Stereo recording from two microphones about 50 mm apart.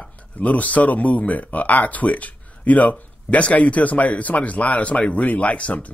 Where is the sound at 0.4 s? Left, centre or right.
Left.